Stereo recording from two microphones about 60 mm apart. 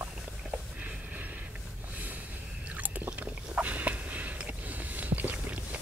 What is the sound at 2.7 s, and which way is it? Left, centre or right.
Chewing, right.